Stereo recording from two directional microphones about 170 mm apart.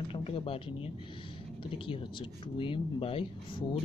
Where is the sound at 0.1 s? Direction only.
35° left (ahead or behind).